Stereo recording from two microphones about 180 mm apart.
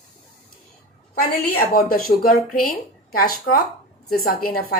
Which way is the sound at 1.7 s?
55° left (ahead or behind).